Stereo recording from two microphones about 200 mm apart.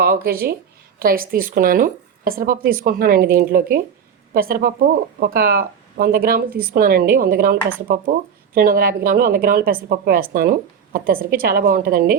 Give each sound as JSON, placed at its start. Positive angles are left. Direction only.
{"t": 0.0, "sound": "a woman's voice", "side_deg": -50}